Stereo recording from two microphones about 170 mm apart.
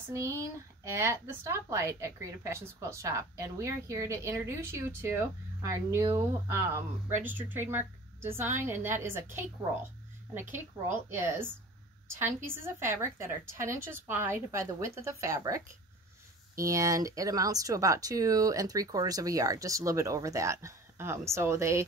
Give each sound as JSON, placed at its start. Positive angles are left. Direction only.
{"t": 0.1, "sound": "speech", "side_deg": -20}
{"t": 11.1, "sound": "speech", "side_deg": -15}